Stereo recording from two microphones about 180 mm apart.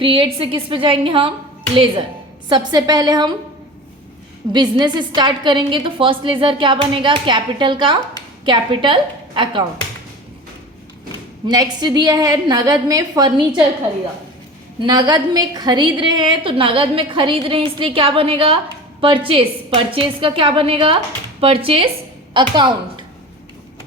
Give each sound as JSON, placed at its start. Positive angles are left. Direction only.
{"t": 0.0, "sound": "a woman's voice", "side_deg": -30}
{"t": 4.5, "sound": "a woman's voice", "side_deg": -25}
{"t": 11.4, "sound": "a woman's voice", "side_deg": -20}
{"t": 14.8, "sound": "a woman's voice", "side_deg": -25}